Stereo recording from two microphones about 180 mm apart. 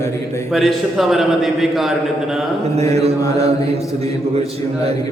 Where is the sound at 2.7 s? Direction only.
35° right (ahead or behind).